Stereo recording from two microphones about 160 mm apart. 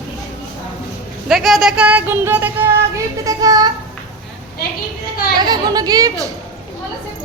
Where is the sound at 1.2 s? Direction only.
Centre (ahead or behind); by 3.7 s 25° right (ahead or behind).